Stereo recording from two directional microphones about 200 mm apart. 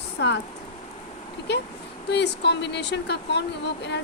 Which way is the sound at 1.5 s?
55° left (ahead or behind).